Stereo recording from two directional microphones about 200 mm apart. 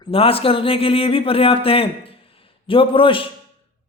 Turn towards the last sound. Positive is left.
turn(degrees=25)  # may be behind; listen again after turning